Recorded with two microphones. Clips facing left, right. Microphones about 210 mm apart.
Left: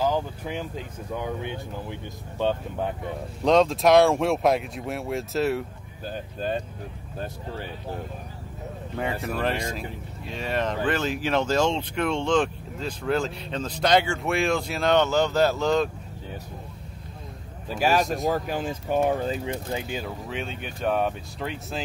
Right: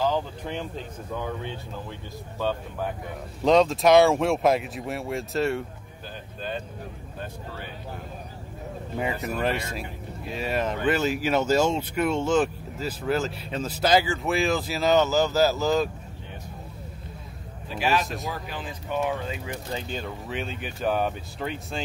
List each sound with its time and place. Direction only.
0.0 s speech: 5° left (ahead or behind)
3.4 s speech: centre (ahead or behind)
8.9 s speech: 5° right (ahead or behind)
17.7 s speech: 40° left (ahead or behind)
19.7 s speech: 5° left (ahead or behind)